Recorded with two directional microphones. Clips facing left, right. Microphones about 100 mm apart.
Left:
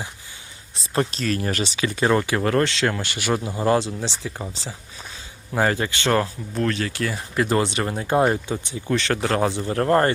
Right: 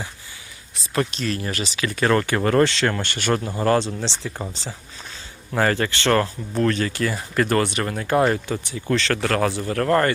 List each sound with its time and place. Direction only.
0.8 s speech: 35° left (ahead or behind)
2.0 s speech: 10° left (ahead or behind)
7.4 s speech: 15° left (ahead or behind)